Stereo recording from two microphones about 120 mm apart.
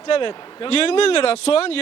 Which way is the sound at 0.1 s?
45° left (ahead or behind).